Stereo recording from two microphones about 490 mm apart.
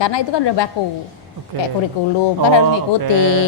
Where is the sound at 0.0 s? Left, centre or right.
Left.